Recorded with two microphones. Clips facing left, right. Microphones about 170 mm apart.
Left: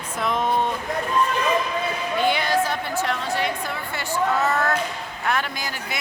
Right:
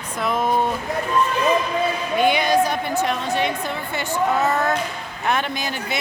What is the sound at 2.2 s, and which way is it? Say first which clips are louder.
A woman's voice: right 4 dB; 15° right (ahead or behind).